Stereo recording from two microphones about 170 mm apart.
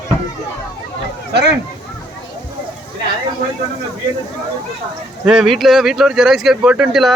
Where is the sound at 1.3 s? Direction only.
75° right (ahead or behind).